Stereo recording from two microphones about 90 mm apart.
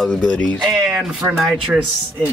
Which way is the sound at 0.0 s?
5° left (ahead or behind).